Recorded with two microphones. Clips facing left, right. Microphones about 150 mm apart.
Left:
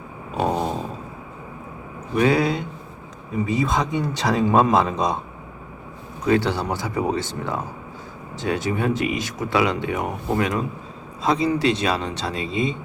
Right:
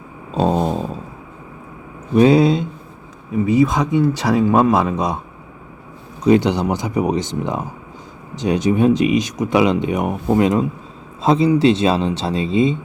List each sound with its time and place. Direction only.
0.3 s a sound: 25° right (ahead or behind)
2.1 s speech: 20° right (ahead or behind)
3.3 s speech: 10° right (ahead or behind)
6.2 s speech: 20° right (ahead or behind)